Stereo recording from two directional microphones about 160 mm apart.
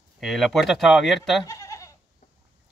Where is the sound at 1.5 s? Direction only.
20° left (ahead or behind).